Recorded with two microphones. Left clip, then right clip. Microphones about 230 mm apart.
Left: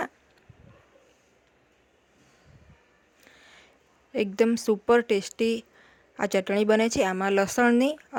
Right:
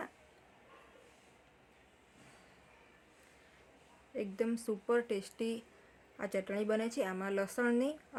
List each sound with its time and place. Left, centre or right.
4.1 s speech: left